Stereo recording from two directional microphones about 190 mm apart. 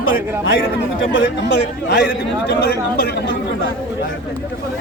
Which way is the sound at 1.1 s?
65° left (ahead or behind).